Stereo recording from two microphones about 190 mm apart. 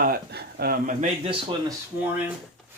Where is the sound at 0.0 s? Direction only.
55° right (ahead or behind).